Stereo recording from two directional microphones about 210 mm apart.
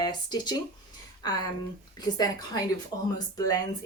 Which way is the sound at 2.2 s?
20° left (ahead or behind).